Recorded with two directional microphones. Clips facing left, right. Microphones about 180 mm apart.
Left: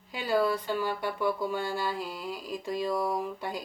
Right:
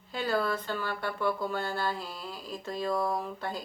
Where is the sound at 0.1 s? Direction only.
15° left (ahead or behind).